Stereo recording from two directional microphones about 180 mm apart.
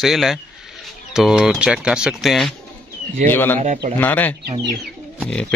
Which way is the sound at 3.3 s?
10° left (ahead or behind).